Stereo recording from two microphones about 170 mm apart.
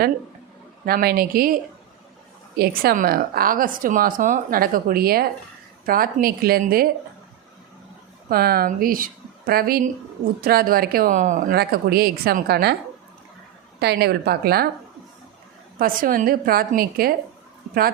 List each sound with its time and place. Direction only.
0.9 s speech: 60° right (ahead or behind)
2.6 s speech: 60° right (ahead or behind)
8.3 s speech: 60° right (ahead or behind)
13.7 s a woman's voice: 75° right (ahead or behind)
15.8 s speech: 55° right (ahead or behind)